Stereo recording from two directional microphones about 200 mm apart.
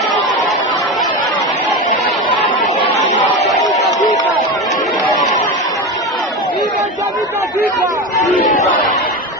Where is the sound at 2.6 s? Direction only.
35° left (ahead or behind).